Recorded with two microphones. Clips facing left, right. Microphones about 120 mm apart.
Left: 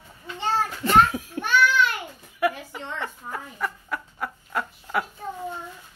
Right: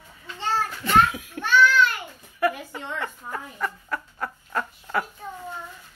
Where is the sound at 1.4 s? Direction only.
20° left (ahead or behind).